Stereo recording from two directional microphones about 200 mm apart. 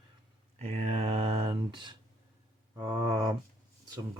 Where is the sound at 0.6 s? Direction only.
30° right (ahead or behind).